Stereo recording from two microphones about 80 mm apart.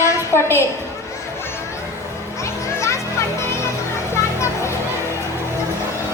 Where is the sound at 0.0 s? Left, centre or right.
Left.